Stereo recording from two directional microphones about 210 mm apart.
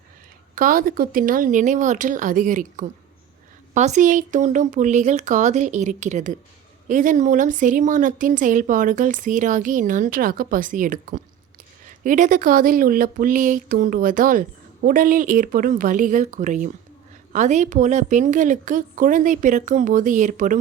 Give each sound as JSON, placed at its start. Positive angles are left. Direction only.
{"t": 0.5, "sound": "speech", "side_deg": -40}